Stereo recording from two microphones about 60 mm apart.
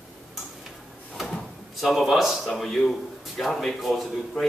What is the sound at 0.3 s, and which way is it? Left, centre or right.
Tick-tock, centre.